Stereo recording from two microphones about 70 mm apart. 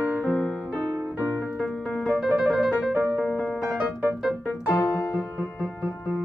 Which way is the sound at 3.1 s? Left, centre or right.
Centre.